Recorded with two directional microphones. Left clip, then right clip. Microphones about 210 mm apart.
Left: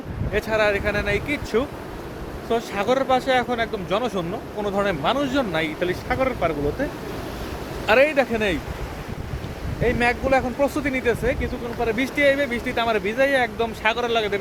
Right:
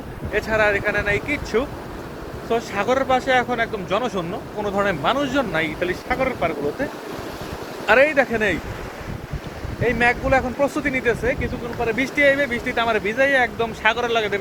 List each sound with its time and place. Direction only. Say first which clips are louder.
0.3 s speech: right 2 dB; 15° left (ahead or behind)
7.9 s speech: right 2 dB; 10° left (ahead or behind)
9.8 s speech: right 2 dB; 10° left (ahead or behind)